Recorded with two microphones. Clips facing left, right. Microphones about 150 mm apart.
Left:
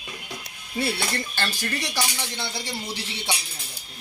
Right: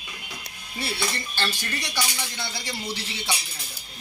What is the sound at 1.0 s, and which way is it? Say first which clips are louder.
Speech: left 1 dB; 50° left (ahead or behind).